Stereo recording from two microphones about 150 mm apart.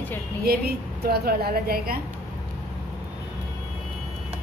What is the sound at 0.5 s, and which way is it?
A woman's voice, 90° right.